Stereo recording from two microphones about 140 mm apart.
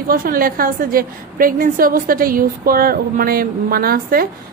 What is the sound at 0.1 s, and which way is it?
A woman's voice, 90° right.